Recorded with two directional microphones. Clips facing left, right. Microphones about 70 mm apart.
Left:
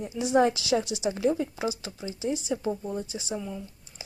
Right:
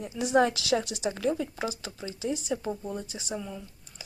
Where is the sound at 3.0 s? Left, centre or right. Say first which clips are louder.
Left 2 dB; right.